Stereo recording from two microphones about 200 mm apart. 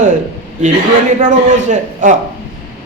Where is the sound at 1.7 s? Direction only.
40° right (ahead or behind).